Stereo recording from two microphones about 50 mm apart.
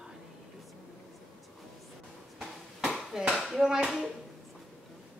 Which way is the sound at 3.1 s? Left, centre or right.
Centre.